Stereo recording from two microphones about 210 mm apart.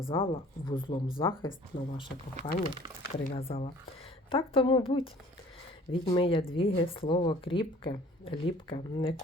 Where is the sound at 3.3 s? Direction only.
25° left (ahead or behind).